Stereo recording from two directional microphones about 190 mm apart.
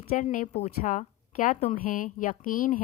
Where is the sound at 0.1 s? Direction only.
45° left (ahead or behind).